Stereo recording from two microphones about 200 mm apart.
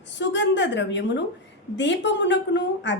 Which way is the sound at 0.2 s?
65° left (ahead or behind).